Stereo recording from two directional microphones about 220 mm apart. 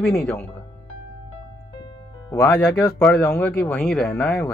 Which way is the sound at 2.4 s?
5° left (ahead or behind).